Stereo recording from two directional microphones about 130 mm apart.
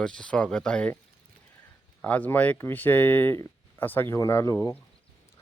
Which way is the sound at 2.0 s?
10° left (ahead or behind).